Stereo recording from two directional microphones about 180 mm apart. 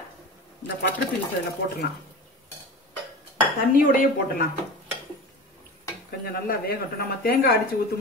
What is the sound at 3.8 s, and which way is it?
Dishes, 55° left (ahead or behind).